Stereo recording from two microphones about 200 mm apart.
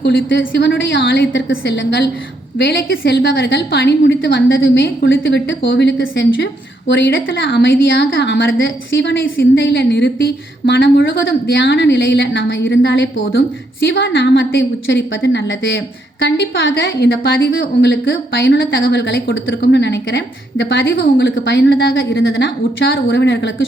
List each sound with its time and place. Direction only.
0.0 s a woman's voice: 55° left (ahead or behind)